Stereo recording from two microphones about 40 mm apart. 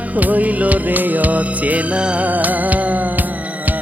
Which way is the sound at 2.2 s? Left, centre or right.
Right.